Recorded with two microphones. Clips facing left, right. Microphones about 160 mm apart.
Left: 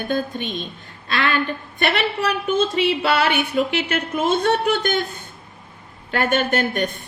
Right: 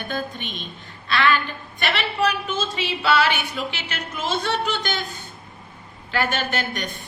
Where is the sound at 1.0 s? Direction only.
45° left (ahead or behind).